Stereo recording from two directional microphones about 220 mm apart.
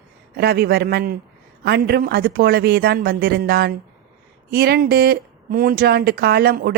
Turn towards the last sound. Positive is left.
turn(degrees=-45)  # may be behind; listen again after turning